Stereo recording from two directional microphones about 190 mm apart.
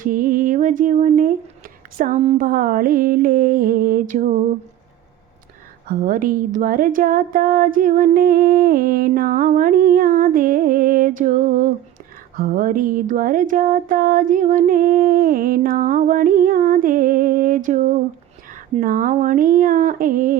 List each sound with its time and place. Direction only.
0.0 s a sound: 45° right (ahead or behind)
2.0 s speech: 40° right (ahead or behind)
5.9 s speech: 45° right (ahead or behind)